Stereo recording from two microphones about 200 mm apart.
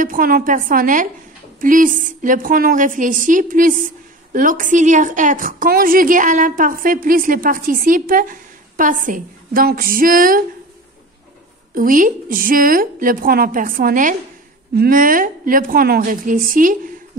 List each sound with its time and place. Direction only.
0.0 s a woman's voice: 45° right (ahead or behind)
11.7 s a woman's voice: 45° right (ahead or behind)